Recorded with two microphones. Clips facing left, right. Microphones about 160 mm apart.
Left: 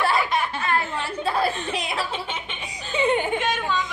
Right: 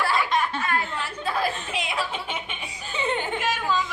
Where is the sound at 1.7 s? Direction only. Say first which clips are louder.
Left 2 dB; 35° left (ahead or behind).